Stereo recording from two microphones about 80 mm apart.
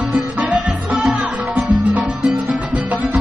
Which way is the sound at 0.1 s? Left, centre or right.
Centre.